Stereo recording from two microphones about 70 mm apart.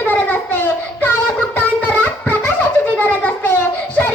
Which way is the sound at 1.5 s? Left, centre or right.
Left.